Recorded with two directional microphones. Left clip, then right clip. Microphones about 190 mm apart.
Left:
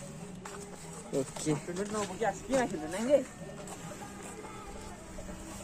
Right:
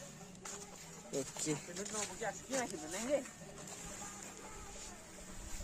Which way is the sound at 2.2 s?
45° left (ahead or behind).